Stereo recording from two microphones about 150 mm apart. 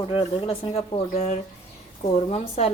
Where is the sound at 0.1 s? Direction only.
35° left (ahead or behind).